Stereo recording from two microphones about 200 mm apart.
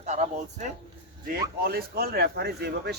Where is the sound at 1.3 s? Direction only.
50° right (ahead or behind).